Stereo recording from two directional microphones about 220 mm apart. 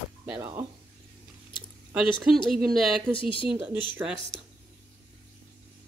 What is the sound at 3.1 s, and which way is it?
Speech, 25° left (ahead or behind).